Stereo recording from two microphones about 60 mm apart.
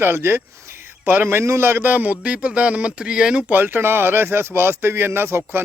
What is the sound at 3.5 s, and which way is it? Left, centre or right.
Speech, right.